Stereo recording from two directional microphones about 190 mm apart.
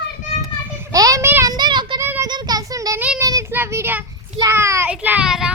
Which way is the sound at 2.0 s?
10° right (ahead or behind).